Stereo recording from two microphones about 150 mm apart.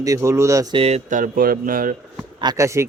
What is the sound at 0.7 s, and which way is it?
Speech, 40° right (ahead or behind).